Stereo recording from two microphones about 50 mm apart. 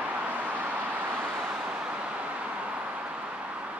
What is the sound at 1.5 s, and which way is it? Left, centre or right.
Vehicle, centre.